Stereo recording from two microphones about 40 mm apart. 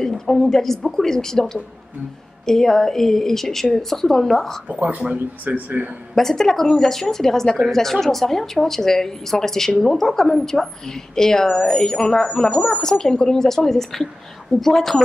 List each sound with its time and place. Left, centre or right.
0.3 s a woman's voice: centre
4.6 s speech: right
6.1 s a woman's voice: centre